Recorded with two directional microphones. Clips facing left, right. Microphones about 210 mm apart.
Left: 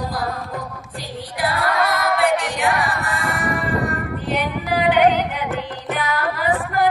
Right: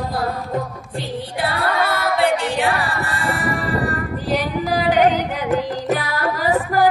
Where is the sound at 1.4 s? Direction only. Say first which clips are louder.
Left 1 dB; 30° right (ahead or behind).